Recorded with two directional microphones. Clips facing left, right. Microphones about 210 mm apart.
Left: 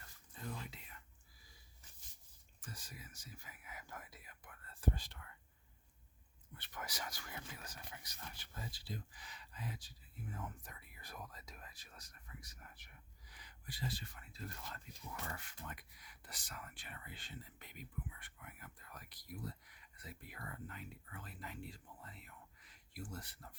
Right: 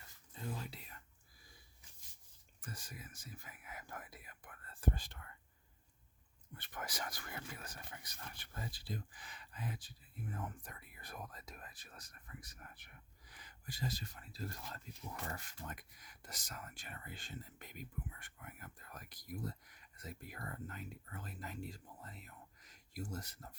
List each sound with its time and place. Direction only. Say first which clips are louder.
2.6 s speech: right 3 dB; 55° right (ahead or behind)
6.5 s speech: right 2 dB; 50° right (ahead or behind)